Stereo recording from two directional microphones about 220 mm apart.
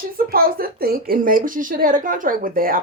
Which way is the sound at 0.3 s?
40° right (ahead or behind).